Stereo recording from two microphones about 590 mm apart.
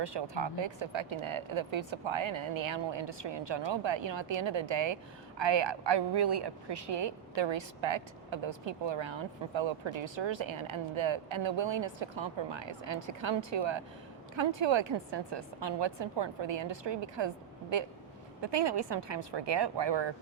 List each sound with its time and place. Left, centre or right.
0.0 s a woman's voice: right